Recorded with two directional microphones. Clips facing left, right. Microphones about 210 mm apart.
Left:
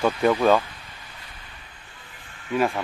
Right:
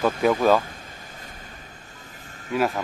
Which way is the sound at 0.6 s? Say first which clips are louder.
Right 4 dB; 45° right (ahead or behind).